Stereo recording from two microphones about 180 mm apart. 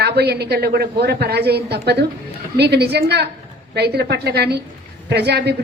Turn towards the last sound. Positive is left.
turn(degrees=-65)  # may be behind; listen again after turning